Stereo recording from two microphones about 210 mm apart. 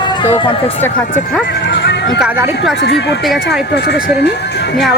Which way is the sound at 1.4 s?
55° left (ahead or behind).